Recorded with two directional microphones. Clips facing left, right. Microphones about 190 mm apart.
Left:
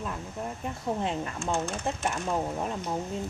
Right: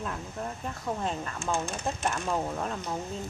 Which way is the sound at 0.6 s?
20° left (ahead or behind).